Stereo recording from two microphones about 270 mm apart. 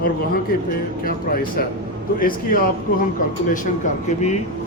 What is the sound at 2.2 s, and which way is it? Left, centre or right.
Speech, left.